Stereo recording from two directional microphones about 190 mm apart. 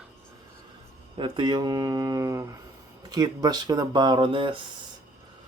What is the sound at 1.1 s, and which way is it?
Speech, 25° right (ahead or behind).